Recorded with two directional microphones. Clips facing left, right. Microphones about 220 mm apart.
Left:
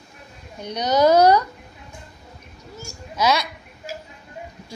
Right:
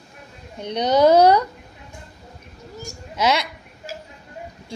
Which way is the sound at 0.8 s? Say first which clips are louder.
Right 1 dB; 25° right (ahead or behind).